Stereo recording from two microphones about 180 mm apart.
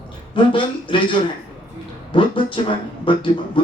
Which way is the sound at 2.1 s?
30° left (ahead or behind).